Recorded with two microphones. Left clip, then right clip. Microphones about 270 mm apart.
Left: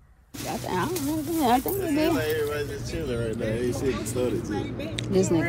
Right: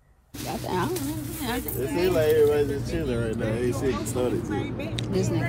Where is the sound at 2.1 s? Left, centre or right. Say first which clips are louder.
Right 6 dB; right.